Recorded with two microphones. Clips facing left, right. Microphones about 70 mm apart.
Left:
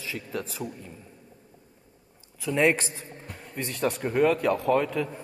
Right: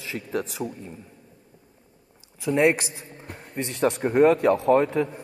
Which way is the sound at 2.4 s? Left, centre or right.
Right.